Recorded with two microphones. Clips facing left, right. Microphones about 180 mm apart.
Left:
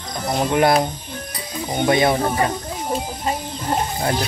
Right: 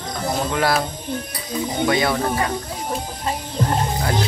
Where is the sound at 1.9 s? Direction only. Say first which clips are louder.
Left 4 dB; 25° left (ahead or behind).